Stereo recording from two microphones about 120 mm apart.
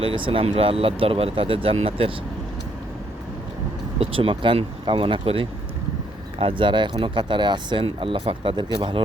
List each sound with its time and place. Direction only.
0.0 s speech: 45° right (ahead or behind)
4.0 s speech: 50° right (ahead or behind)